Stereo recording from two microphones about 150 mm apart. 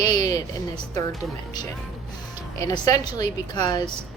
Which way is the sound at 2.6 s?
20° left (ahead or behind).